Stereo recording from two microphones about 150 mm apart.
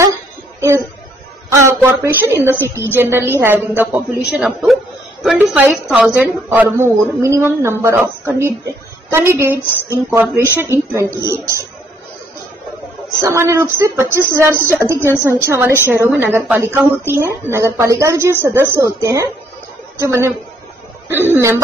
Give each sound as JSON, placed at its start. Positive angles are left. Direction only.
{"t": 0.6, "sound": "music", "side_deg": -20}
{"t": 1.5, "sound": "a sound", "side_deg": -15}
{"t": 2.8, "sound": "a woman's voice", "side_deg": -15}
{"t": 13.2, "sound": "a woman's voice", "side_deg": -20}